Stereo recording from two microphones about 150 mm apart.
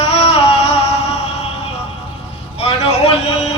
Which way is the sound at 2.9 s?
45° left (ahead or behind).